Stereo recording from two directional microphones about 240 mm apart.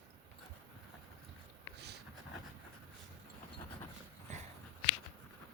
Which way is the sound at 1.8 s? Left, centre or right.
Right.